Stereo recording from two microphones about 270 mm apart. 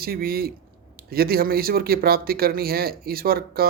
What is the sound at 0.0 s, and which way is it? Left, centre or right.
Speech, right.